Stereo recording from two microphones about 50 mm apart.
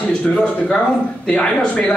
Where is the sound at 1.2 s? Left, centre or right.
Centre.